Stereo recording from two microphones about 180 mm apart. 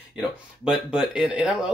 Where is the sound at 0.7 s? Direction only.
5° right (ahead or behind).